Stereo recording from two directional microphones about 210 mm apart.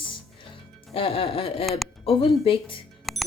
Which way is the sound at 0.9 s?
25° left (ahead or behind).